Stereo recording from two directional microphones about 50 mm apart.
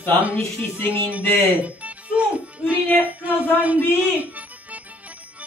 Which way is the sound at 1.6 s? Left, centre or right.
Right.